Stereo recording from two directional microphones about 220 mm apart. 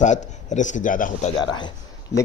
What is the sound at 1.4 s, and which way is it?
Speech, 20° left (ahead or behind).